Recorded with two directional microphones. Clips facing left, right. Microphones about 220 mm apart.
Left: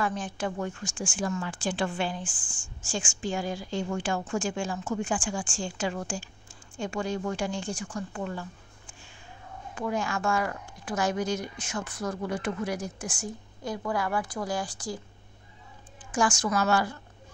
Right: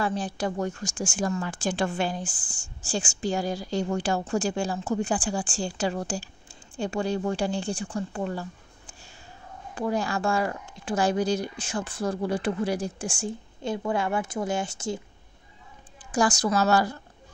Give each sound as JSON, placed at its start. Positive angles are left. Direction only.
{"t": 0.0, "sound": "speech", "side_deg": -35}
{"t": 16.1, "sound": "speech", "side_deg": -35}